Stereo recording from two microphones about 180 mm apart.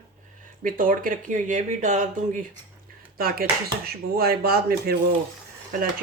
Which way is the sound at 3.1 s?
55° right (ahead or behind).